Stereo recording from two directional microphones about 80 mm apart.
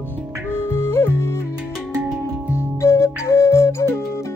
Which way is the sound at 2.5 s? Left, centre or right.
Left.